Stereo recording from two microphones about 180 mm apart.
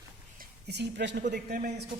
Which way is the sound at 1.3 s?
60° right (ahead or behind).